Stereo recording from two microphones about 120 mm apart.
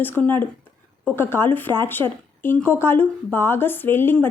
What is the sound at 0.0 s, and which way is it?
A woman's voice, 15° left (ahead or behind).